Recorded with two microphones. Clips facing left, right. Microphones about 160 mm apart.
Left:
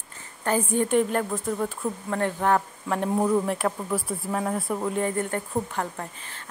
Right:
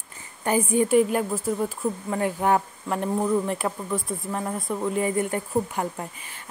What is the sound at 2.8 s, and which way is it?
Speech, centre (ahead or behind).